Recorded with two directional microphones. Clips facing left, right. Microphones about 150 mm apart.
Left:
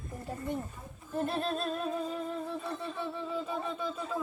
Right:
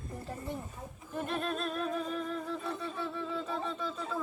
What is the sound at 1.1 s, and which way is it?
Music, 30° left (ahead or behind).